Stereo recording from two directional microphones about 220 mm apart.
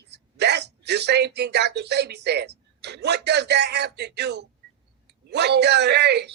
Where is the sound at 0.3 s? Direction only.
50° right (ahead or behind).